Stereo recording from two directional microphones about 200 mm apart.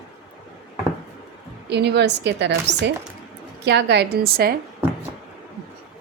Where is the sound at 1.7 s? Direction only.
60° right (ahead or behind).